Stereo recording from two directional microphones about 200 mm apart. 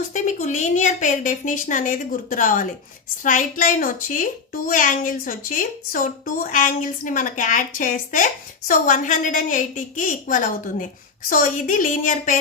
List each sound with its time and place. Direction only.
0.1 s a woman's voice: 40° left (ahead or behind)